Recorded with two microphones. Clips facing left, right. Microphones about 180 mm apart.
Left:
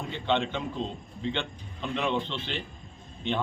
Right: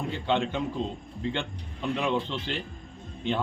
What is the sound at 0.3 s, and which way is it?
Speech, 10° right (ahead or behind).